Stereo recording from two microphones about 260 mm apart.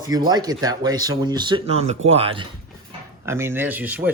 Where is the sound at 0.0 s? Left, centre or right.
Centre.